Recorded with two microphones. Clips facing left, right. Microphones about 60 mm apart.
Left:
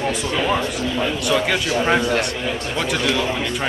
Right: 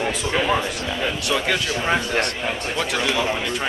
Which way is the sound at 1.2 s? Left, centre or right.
Centre.